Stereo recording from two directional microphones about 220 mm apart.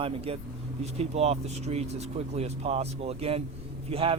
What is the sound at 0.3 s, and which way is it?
A man's voice, 25° right (ahead or behind).